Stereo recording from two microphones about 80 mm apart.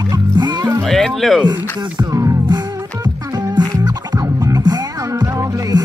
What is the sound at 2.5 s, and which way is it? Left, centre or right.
Music, right.